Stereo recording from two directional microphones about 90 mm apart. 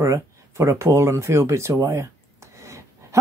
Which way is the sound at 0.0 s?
30° right (ahead or behind).